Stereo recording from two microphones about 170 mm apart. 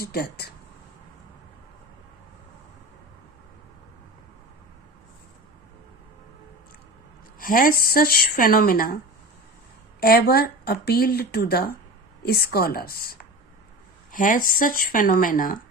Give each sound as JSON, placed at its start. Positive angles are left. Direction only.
{"t": 0.0, "sound": "speech", "side_deg": 65}
{"t": 7.3, "sound": "speech", "side_deg": 55}
{"t": 10.0, "sound": "speech", "side_deg": 65}
{"t": 14.1, "sound": "speech", "side_deg": 55}